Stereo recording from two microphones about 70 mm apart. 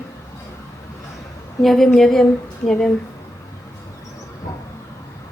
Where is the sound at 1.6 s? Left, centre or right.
Centre.